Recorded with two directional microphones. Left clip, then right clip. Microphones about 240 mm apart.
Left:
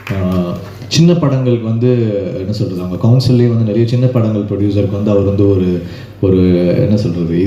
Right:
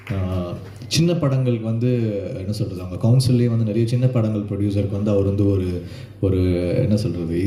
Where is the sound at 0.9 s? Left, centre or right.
Right.